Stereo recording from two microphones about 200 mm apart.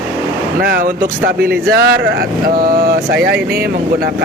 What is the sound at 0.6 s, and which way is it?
Speech, 45° right (ahead or behind).